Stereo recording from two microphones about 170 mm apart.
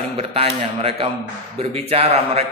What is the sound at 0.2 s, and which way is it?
A man's voice, 35° right (ahead or behind).